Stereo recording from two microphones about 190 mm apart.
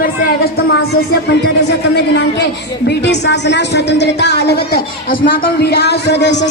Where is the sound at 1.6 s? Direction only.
65° left (ahead or behind).